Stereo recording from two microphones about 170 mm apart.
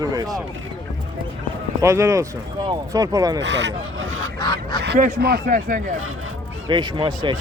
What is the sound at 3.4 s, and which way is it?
Speech, 90° right.